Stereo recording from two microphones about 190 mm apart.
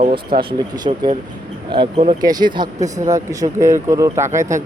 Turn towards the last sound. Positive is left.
turn(degrees=-15)  # may be behind; listen again after turning